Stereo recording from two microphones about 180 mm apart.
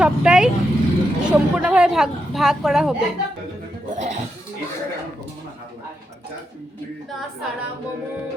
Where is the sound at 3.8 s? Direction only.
40° right (ahead or behind).